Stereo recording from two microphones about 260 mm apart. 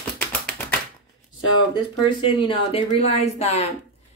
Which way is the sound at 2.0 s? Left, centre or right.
Left.